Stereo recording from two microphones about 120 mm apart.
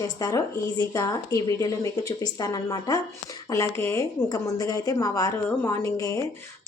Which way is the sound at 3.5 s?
20° left (ahead or behind).